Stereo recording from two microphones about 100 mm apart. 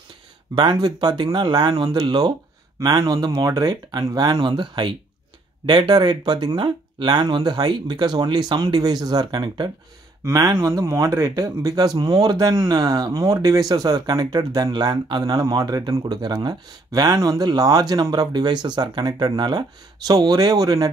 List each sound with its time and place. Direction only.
0.6 s speech: 45° right (ahead or behind)
10.2 s speech: 30° right (ahead or behind)